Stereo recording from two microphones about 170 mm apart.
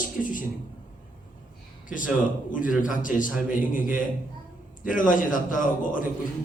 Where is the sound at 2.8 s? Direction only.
50° left (ahead or behind).